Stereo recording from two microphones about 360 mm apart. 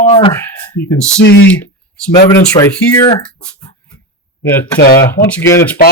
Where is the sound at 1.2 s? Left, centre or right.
Left.